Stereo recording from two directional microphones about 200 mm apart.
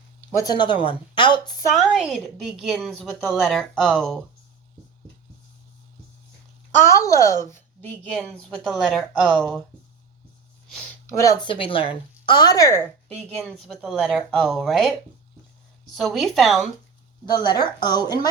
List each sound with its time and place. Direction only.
0.3 s speech: 20° left (ahead or behind)
1.7 s a woman's voice: centre (ahead or behind)
6.7 s a woman's voice: 15° left (ahead or behind)
11.2 s speech: 20° left (ahead or behind)
13.3 s a woman's voice: centre (ahead or behind)
16.0 s a woman's voice: centre (ahead or behind)
17.2 s speech: 20° left (ahead or behind)